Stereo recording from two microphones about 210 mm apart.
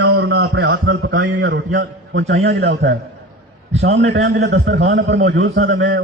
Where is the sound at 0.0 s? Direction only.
55° right (ahead or behind).